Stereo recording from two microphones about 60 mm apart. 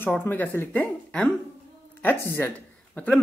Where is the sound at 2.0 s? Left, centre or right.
Left.